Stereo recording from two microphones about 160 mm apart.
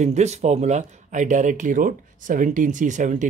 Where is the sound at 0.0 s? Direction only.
45° right (ahead or behind).